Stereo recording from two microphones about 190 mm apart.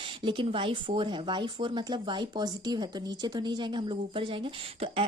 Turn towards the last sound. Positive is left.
turn(degrees=-30)  # may be behind; listen again after turning